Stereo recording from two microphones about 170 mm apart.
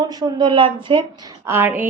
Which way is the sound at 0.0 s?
25° right (ahead or behind).